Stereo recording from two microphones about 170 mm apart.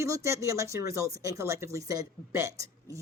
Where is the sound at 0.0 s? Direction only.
20° right (ahead or behind).